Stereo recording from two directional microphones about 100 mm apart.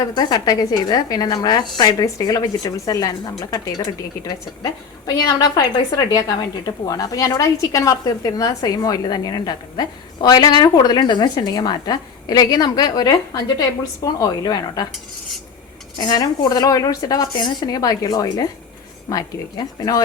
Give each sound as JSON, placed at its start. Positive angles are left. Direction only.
{"t": 0.1, "sound": "a woman's voice", "side_deg": 45}
{"t": 16.0, "sound": "a woman's voice", "side_deg": 45}